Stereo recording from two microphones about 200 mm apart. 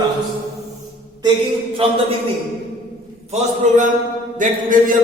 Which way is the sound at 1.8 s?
30° right (ahead or behind).